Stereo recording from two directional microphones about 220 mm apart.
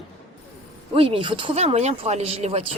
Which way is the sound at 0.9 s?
25° right (ahead or behind).